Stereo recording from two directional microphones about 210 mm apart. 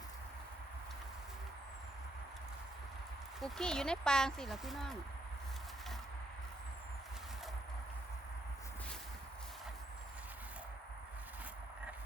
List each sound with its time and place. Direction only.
3.4 s speech: 5° left (ahead or behind)